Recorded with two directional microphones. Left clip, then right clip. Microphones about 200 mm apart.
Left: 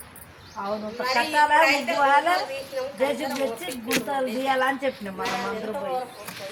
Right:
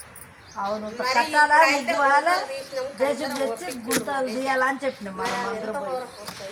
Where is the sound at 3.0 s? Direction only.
Centre (ahead or behind).